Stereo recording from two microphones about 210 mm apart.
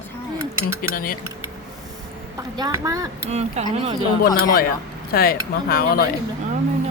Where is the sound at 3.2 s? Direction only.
30° right (ahead or behind).